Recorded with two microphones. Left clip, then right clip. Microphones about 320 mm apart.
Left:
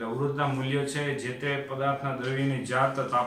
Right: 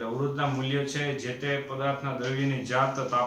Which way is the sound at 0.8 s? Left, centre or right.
Centre.